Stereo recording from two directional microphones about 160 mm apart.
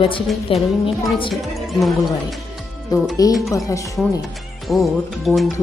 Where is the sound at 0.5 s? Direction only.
35° left (ahead or behind).